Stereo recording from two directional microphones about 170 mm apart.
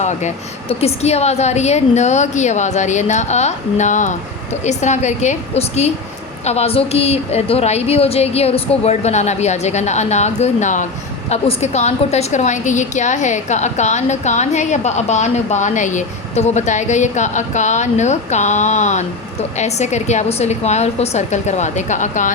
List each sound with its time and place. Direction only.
0.0 s a woman's voice: 45° left (ahead or behind)